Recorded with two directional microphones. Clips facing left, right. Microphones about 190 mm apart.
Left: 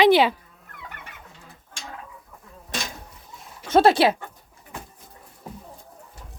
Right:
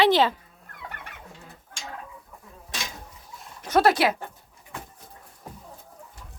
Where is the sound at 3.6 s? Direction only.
25° left (ahead or behind).